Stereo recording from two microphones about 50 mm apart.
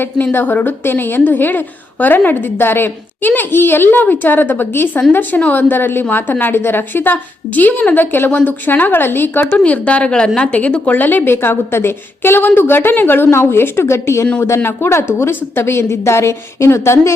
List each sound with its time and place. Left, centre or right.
0.0 s a woman's voice: left
9.5 s a woman's voice: left